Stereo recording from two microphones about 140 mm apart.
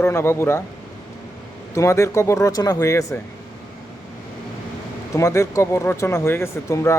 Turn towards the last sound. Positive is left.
turn(degrees=20)  # may be behind; listen again after turning